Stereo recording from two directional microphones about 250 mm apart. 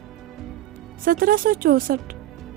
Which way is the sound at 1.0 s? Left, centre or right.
Right.